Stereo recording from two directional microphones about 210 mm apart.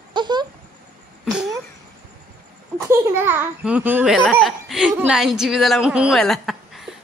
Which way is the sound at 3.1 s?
10° right (ahead or behind).